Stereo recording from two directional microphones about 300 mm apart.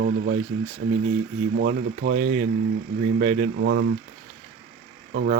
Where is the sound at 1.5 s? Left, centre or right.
Right.